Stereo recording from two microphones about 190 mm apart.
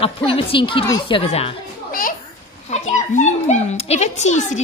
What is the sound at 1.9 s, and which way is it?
Children playing, 50° left (ahead or behind).